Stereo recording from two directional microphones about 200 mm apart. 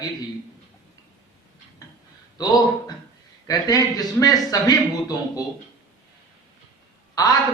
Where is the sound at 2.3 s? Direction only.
20° left (ahead or behind).